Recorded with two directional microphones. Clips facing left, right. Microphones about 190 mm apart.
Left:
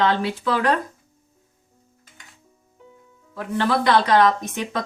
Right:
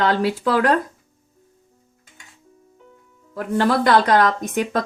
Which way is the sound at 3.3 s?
45° right (ahead or behind).